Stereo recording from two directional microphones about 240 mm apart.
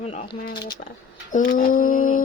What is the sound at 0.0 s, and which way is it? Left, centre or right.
Speech, left.